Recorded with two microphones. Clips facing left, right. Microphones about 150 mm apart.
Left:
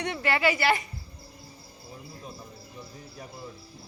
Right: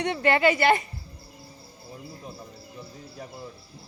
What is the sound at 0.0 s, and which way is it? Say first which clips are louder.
Speech: right 4 dB; 20° right (ahead or behind).